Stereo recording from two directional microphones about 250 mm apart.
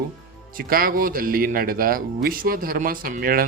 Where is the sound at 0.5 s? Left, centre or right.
Right.